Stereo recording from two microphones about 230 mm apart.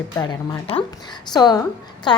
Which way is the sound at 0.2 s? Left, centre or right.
Centre.